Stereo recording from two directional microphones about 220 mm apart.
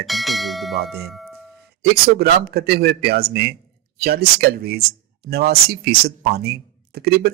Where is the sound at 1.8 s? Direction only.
45° right (ahead or behind).